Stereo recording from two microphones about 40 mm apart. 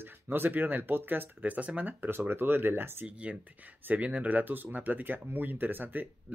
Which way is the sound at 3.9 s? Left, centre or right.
Right.